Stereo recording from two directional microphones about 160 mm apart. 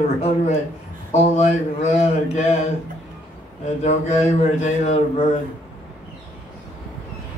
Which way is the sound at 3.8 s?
45° left (ahead or behind).